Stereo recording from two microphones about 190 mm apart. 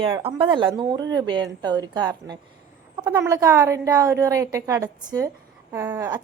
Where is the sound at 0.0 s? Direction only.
30° right (ahead or behind).